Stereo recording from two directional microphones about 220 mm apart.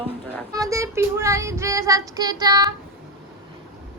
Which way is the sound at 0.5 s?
15° right (ahead or behind).